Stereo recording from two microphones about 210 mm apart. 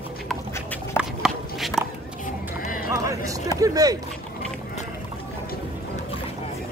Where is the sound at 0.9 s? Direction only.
Centre (ahead or behind).